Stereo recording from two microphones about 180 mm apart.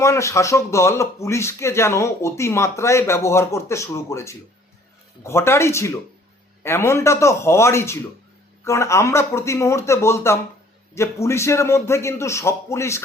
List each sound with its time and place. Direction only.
0.0 s speech: 15° left (ahead or behind)